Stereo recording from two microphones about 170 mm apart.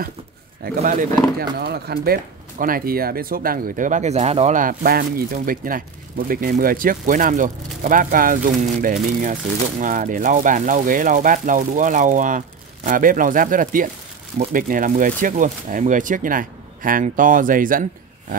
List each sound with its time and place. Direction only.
1.4 s speech: 65° right (ahead or behind)